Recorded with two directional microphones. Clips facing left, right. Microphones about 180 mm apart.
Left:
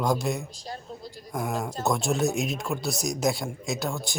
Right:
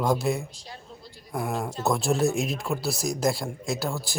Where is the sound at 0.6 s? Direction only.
40° left (ahead or behind).